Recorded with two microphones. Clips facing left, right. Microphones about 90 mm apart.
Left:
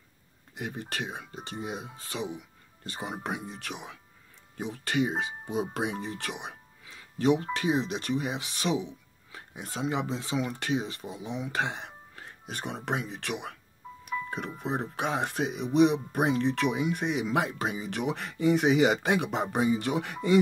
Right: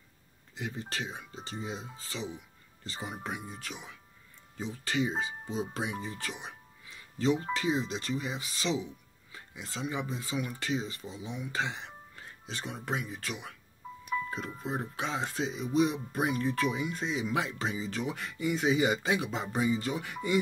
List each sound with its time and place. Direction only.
0.6 s speech: 60° left (ahead or behind)
9.3 s a sound: 55° left (ahead or behind)
9.9 s speech: 85° left
10.5 s speech: 60° left (ahead or behind)
11.0 s speech: 55° left (ahead or behind)
11.3 s music: 65° left (ahead or behind)
13.1 s speech: 65° left (ahead or behind)
14.6 s speech: 65° left (ahead or behind)